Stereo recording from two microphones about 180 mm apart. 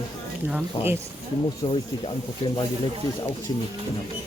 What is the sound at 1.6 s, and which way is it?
Speech, 30° left (ahead or behind).